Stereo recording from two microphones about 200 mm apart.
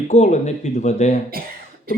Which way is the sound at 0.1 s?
35° left (ahead or behind).